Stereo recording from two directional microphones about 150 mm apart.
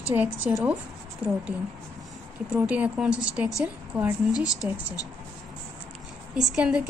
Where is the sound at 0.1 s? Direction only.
10° right (ahead or behind).